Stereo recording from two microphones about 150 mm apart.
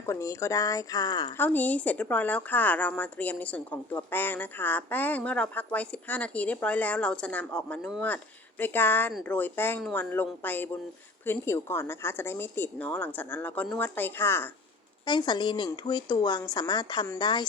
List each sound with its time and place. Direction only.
0.0 s a woman's voice: 20° left (ahead or behind)
1.4 s a woman's voice: 10° left (ahead or behind)
15.0 s a woman's voice: 30° left (ahead or behind)